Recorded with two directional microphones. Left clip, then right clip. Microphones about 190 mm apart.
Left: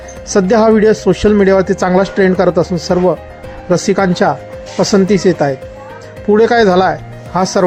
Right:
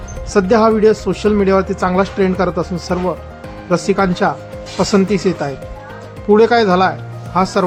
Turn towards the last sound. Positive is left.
turn(degrees=20)  # may be behind; listen again after turning